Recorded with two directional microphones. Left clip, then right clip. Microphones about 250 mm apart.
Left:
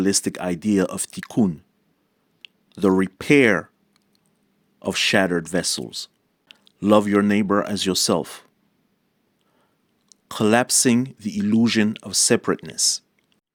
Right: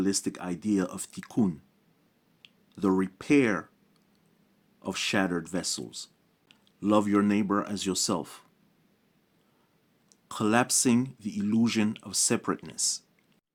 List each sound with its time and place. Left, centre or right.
0.0 s speech: left
4.8 s speech: left
10.1 s speech: left